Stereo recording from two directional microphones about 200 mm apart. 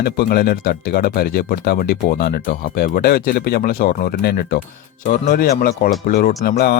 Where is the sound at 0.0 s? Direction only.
50° left (ahead or behind).